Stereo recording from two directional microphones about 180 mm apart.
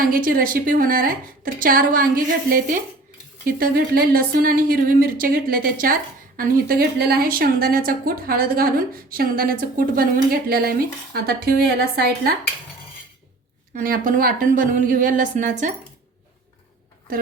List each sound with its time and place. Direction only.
0.0 s a woman's voice: 55° right (ahead or behind)
13.7 s a woman's voice: 50° right (ahead or behind)